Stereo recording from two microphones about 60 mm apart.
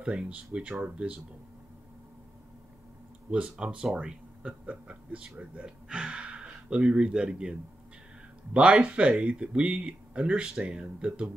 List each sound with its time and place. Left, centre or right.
0.0 s speech: centre
3.3 s speech: centre
8.5 s speech: centre